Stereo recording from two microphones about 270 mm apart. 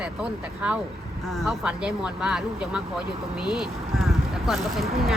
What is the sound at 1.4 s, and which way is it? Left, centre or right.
Speech, centre.